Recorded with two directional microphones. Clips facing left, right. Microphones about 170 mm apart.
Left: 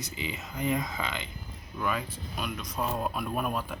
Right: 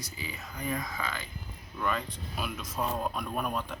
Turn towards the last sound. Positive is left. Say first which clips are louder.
# left 2 dB
turn(degrees=5)  # may be behind; listen again after turning